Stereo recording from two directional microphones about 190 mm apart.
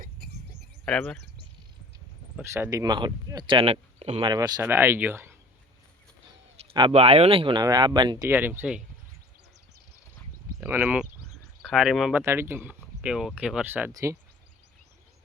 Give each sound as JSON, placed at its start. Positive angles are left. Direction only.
{"t": 0.9, "sound": "speech", "side_deg": 5}
{"t": 2.3, "sound": "speech", "side_deg": -15}
{"t": 6.7, "sound": "speech", "side_deg": -30}
{"t": 8.3, "sound": "speech", "side_deg": -10}
{"t": 10.6, "sound": "speech", "side_deg": -10}
{"t": 12.2, "sound": "speech", "side_deg": -10}